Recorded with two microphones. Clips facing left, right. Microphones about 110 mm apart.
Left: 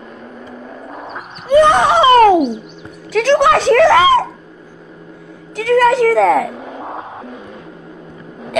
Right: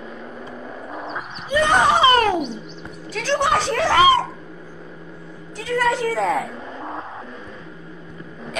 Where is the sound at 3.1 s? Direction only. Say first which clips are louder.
Left 8 dB; 85° left.